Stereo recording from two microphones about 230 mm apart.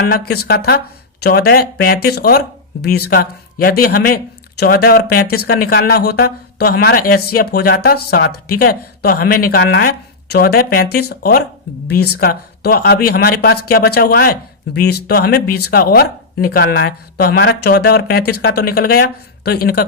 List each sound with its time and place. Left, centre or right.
0.0 s speech: left